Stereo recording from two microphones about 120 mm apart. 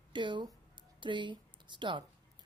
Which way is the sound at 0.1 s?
40° right (ahead or behind).